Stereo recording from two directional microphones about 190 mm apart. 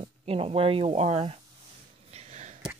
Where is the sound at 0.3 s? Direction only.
30° right (ahead or behind).